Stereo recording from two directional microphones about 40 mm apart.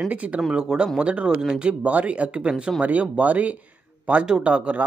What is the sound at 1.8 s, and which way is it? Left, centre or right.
Speech, right.